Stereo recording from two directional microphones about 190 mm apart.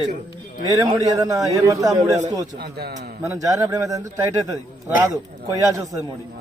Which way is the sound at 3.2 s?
15° right (ahead or behind).